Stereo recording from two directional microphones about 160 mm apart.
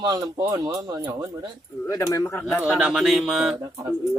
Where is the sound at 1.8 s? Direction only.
20° left (ahead or behind).